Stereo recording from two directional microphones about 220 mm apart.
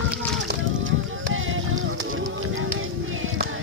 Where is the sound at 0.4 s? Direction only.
60° right (ahead or behind).